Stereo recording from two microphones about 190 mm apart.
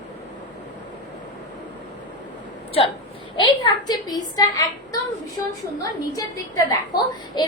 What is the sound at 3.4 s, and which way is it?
A woman's voice, 20° left (ahead or behind).